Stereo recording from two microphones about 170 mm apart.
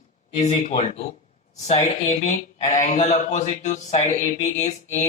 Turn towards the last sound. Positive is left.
turn(degrees=45)  # may be behind; listen again after turning